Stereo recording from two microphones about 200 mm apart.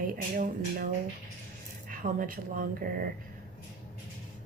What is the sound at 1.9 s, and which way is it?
Speech, 45° right (ahead or behind).